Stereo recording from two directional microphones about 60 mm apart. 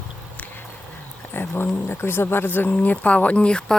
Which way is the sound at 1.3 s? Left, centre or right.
Left.